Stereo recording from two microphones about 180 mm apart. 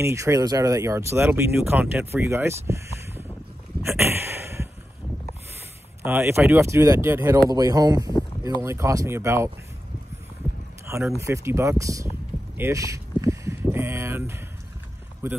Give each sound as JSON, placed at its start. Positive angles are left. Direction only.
{"t": 0.0, "sound": "speech", "side_deg": -15}
{"t": 6.0, "sound": "speech", "side_deg": -15}
{"t": 11.1, "sound": "speech", "side_deg": -15}
{"t": 12.5, "sound": "a sound", "side_deg": -15}
{"t": 15.2, "sound": "speech", "side_deg": -15}